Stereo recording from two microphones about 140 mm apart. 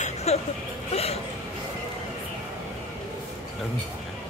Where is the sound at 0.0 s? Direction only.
50° left (ahead or behind).